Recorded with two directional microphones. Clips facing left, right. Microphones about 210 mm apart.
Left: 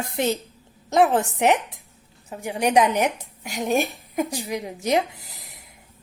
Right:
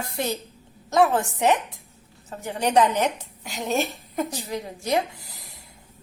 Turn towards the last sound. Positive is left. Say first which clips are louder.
# even
turn(degrees=20)  # may be behind; listen again after turning